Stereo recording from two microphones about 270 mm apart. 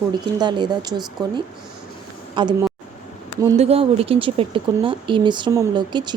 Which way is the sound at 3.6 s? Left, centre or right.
Right.